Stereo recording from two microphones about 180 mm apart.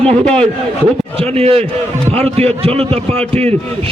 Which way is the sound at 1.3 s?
35° right (ahead or behind).